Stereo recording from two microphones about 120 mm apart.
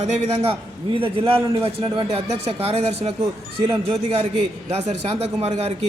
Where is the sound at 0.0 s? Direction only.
60° right (ahead or behind).